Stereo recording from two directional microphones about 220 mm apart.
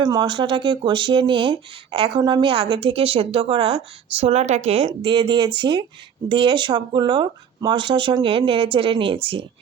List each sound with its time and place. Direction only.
0.0 s speech: 20° right (ahead or behind)